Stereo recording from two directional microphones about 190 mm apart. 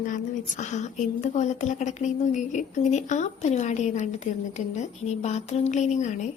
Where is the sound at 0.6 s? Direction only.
40° left (ahead or behind).